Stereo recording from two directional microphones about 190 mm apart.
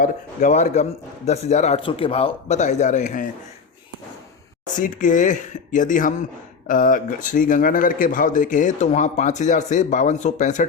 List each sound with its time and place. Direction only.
0.0 s speech: 40° left (ahead or behind)
4.6 s speech: 40° left (ahead or behind)